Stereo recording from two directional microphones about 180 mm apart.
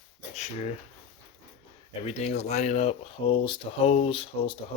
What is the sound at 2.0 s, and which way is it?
Speech, 35° left (ahead or behind).